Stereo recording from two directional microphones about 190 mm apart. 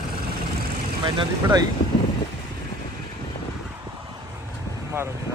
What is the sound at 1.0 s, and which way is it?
Speech, 25° right (ahead or behind).